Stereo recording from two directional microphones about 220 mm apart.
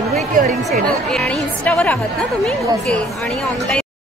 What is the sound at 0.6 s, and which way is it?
Speech, centre (ahead or behind).